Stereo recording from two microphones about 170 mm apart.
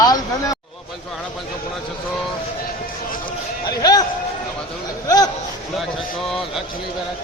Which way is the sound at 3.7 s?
20° left (ahead or behind).